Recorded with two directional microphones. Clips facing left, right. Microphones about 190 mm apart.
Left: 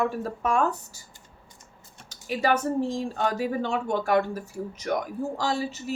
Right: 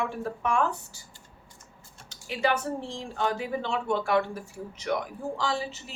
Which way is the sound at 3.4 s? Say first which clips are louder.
Left 4 dB; 40° left (ahead or behind).